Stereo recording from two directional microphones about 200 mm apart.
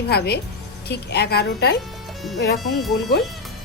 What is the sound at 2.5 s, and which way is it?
Speech, centre (ahead or behind).